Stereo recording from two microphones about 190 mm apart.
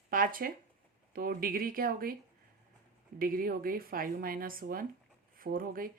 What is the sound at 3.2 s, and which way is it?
Speech, 50° right (ahead or behind).